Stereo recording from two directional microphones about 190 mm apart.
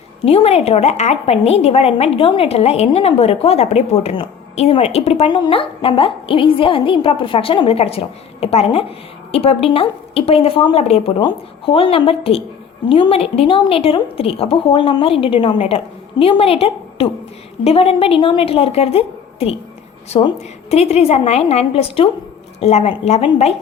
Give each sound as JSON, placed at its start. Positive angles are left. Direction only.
{"t": 0.3, "sound": "a woman's voice", "side_deg": 30}
{"t": 20.7, "sound": "a woman's voice", "side_deg": 35}